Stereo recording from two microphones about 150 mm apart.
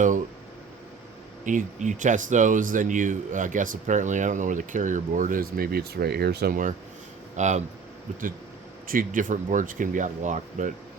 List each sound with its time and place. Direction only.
1.5 s speech: 55° right (ahead or behind)
7.3 s speech: 50° right (ahead or behind)
8.9 s speech: 65° right (ahead or behind)